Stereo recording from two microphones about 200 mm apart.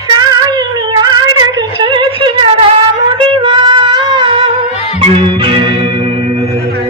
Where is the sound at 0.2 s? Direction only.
20° right (ahead or behind).